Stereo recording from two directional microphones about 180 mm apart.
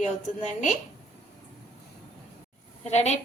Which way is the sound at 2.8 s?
40° left (ahead or behind).